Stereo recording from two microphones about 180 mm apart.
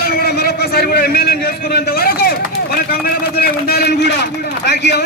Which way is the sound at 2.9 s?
55° left (ahead or behind).